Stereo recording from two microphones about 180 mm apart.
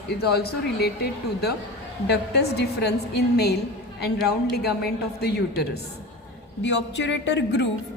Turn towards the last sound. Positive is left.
turn(degrees=75)  # may be behind; listen again after turning